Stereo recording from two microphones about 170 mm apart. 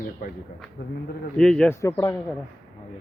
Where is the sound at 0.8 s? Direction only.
75° left (ahead or behind).